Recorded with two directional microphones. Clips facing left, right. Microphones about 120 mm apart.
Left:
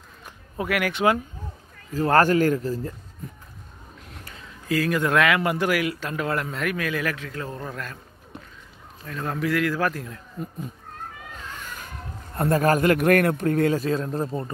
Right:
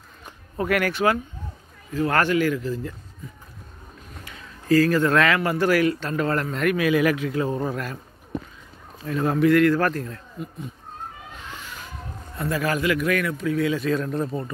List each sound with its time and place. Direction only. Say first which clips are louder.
0.2 s a sound: right 3 dB; 10° left (ahead or behind)
0.9 s speech: even; 20° left (ahead or behind)
2.0 s speech: left 2 dB; 35° left (ahead or behind)
4.6 s a man's voice: right 5 dB; 15° left (ahead or behind)
6.8 s a man's voice: right 7 dB; 10° right (ahead or behind)
9.0 s a man's voice: right 8 dB; 5° right (ahead or behind); by 10.1 s 10° left (ahead or behind)
10.4 s speech: left 1 dB; 35° left (ahead or behind)
12.4 s a man's voice: left 5 dB; 50° left (ahead or behind)
13.8 s speech: right 1 dB; 30° left (ahead or behind)